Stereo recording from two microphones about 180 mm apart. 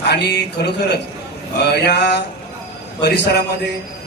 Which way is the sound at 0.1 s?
65° left (ahead or behind).